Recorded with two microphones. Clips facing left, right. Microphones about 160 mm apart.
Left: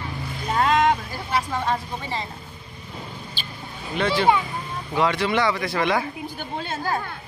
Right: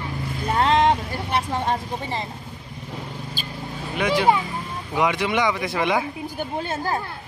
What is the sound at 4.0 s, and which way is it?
Speech, 15° right (ahead or behind).